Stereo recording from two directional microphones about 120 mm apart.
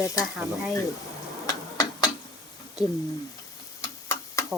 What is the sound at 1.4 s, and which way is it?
Tick-tock, 30° left (ahead or behind).